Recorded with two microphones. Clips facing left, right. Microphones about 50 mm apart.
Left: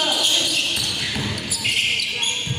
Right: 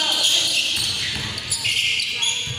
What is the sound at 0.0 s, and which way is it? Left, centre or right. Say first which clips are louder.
Basketball bounce: left 1 dB; centre.